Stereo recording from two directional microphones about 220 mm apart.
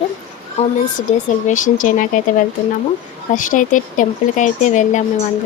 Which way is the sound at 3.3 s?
35° left (ahead or behind).